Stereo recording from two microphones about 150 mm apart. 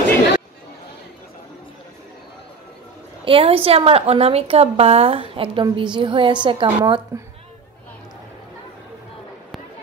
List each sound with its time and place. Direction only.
3.3 s a woman's voice: 40° right (ahead or behind)